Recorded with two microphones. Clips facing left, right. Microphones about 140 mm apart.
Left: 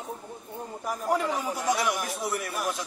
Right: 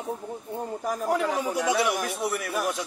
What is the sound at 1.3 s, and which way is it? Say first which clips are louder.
Speech: right 3 dB; 65° right (ahead or behind).